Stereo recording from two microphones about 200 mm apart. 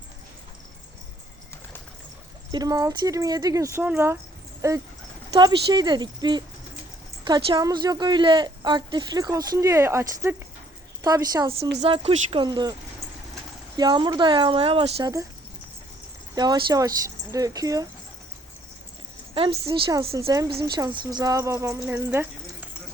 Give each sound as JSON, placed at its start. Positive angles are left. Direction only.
{"t": 2.5, "sound": "a woman's voice", "side_deg": -20}
{"t": 11.8, "sound": "a woman's voice", "side_deg": -30}
{"t": 13.7, "sound": "a woman's voice", "side_deg": -20}
{"t": 16.3, "sound": "a woman's voice", "side_deg": -20}
{"t": 19.3, "sound": "a woman's voice", "side_deg": -25}